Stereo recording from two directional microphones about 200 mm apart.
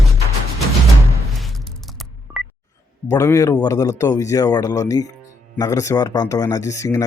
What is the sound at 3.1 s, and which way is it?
Speech, 15° left (ahead or behind).